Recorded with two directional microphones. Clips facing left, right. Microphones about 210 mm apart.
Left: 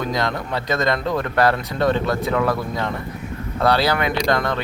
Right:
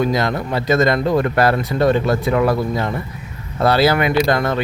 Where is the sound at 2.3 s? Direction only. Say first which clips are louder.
Right 4 dB; 10° right (ahead or behind).